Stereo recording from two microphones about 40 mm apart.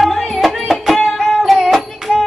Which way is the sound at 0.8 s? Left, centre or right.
Centre.